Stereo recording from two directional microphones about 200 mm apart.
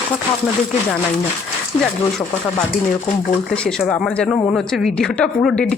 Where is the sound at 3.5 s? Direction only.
5° left (ahead or behind).